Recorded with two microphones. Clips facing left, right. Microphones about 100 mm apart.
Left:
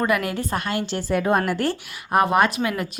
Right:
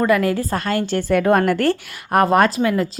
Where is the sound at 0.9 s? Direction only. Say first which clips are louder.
Right 6 dB; 55° right (ahead or behind).